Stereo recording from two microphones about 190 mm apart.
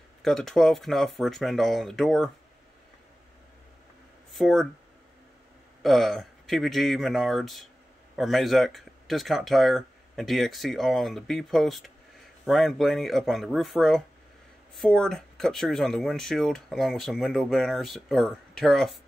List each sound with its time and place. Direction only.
0.2 s speech: centre (ahead or behind)
4.3 s speech: centre (ahead or behind)
5.8 s speech: centre (ahead or behind)